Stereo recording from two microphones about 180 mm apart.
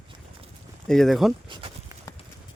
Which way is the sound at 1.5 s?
30° right (ahead or behind).